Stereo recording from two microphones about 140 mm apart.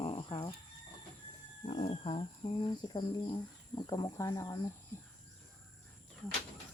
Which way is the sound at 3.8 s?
30° left (ahead or behind).